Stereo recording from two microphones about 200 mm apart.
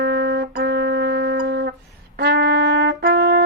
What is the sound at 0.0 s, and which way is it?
Music, 55° right (ahead or behind).